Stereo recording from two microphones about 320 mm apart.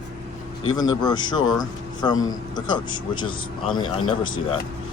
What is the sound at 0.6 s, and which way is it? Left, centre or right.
Speech, centre.